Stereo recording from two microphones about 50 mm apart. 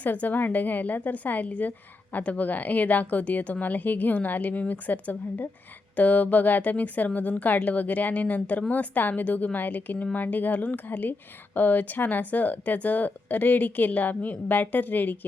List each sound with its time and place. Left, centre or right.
0.0 s a woman's voice: left